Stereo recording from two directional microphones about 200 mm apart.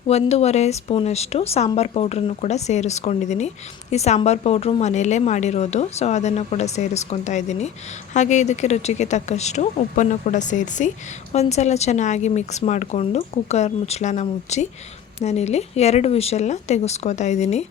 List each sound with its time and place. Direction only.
0.1 s speech: 30° left (ahead or behind)